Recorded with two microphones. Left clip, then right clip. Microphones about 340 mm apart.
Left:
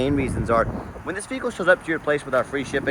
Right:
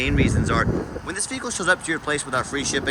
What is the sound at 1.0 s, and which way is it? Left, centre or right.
Speech, centre.